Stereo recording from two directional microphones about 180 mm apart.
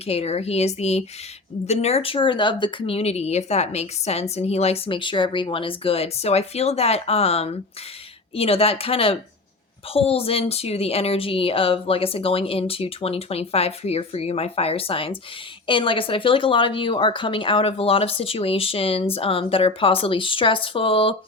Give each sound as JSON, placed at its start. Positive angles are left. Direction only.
{"t": 0.0, "sound": "speech", "side_deg": 35}